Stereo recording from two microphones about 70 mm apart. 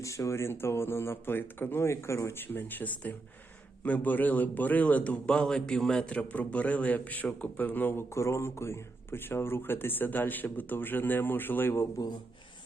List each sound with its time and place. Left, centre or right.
0.0 s a man's voice: left
8.1 s a man's voice: left